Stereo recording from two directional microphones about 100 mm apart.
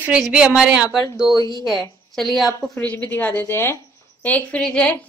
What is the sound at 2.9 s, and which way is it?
A woman's voice, 15° left (ahead or behind).